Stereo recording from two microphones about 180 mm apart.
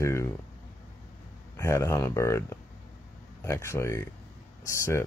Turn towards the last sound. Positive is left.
turn(degrees=15)  # may be behind; listen again after turning